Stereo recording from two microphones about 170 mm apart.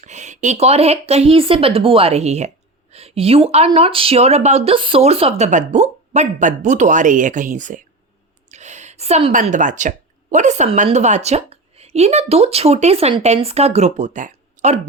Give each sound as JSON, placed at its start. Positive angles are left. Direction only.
{"t": 0.0, "sound": "a woman's voice", "side_deg": -45}